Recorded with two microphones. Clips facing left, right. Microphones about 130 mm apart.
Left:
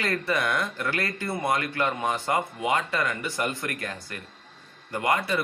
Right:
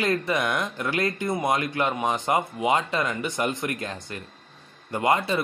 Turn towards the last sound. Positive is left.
turn(degrees=-25)  # may be behind; listen again after turning